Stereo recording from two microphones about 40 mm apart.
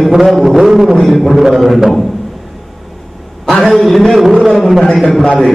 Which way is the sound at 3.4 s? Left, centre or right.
Centre.